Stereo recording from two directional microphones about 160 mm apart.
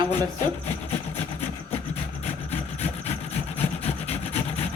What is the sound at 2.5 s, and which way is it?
Wood, 45° left (ahead or behind).